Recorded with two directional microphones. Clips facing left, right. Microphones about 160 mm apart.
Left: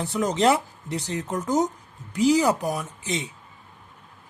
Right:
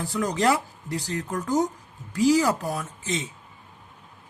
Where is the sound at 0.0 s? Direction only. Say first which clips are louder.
Left 2 dB; 20° left (ahead or behind).